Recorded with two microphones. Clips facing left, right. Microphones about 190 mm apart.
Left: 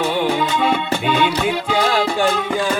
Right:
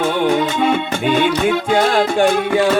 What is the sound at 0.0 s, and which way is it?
Music, 50° right (ahead or behind).